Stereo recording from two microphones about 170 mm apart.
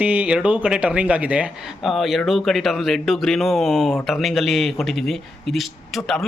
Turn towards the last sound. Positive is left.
turn(degrees=0)  # may be behind; listen again after turning